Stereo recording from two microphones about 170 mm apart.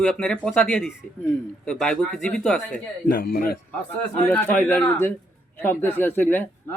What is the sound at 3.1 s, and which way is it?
Speech, 55° left (ahead or behind).